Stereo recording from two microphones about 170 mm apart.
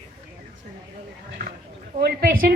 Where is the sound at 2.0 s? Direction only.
65° right (ahead or behind).